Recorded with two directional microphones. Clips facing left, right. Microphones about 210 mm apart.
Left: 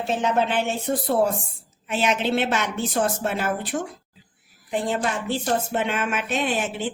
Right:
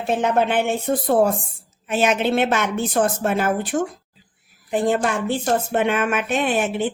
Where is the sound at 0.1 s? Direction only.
55° right (ahead or behind).